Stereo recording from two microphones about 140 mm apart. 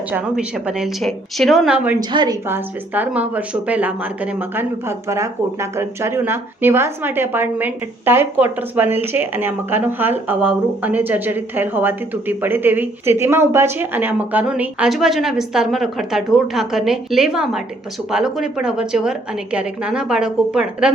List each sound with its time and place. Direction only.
0.1 s a woman's voice: 5° right (ahead or behind)
2.0 s a woman's voice: 30° right (ahead or behind)
2.5 s a woman's voice: 15° right (ahead or behind)